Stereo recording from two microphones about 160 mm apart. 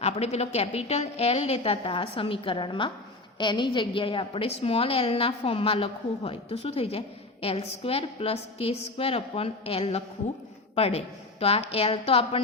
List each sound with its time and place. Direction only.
0.0 s a woman's voice: 40° left (ahead or behind)